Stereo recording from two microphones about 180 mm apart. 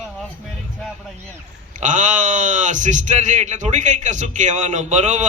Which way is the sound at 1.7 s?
45° right (ahead or behind).